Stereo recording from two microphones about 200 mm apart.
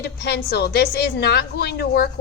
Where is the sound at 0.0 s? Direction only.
55° left (ahead or behind).